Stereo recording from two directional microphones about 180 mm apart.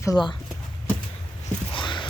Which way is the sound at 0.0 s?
25° left (ahead or behind).